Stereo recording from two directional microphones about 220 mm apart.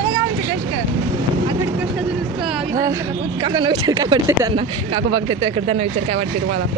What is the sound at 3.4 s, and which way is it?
Speech, 20° right (ahead or behind).